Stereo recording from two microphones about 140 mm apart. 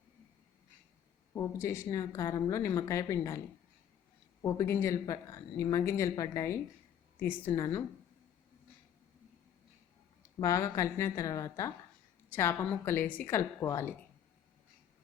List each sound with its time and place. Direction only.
1.3 s a woman's voice: 20° left (ahead or behind)
4.4 s a woman's voice: 20° left (ahead or behind)
10.3 s a woman's voice: 20° left (ahead or behind)